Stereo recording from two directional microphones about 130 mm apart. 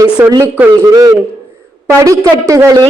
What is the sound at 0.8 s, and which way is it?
A woman's voice, 30° right (ahead or behind).